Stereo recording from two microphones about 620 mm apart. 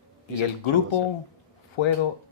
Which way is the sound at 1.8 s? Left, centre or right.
Left.